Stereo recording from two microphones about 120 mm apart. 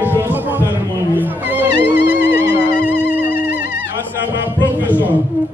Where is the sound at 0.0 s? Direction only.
15° right (ahead or behind).